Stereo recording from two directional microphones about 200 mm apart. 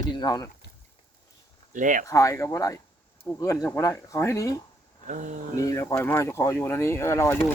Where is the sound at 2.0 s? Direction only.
15° left (ahead or behind).